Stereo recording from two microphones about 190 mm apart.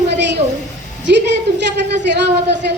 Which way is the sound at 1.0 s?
65° right (ahead or behind).